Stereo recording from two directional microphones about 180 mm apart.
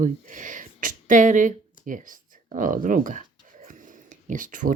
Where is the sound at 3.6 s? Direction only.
45° right (ahead or behind).